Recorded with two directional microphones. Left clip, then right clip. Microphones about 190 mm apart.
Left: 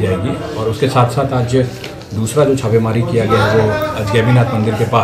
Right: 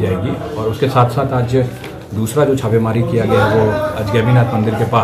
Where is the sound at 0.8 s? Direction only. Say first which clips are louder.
Even; 5° right (ahead or behind).